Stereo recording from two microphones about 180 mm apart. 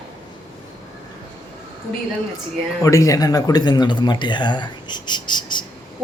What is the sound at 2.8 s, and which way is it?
Speech, 15° left (ahead or behind).